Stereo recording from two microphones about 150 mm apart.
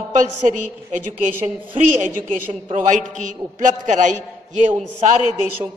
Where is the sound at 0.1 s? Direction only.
55° right (ahead or behind).